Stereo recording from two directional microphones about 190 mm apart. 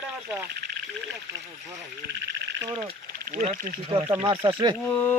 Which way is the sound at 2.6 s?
25° right (ahead or behind).